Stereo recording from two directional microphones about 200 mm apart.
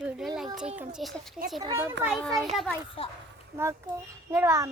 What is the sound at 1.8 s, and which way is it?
Speech, 10° right (ahead or behind).